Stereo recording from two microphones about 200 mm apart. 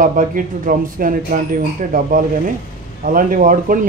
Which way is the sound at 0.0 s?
40° right (ahead or behind).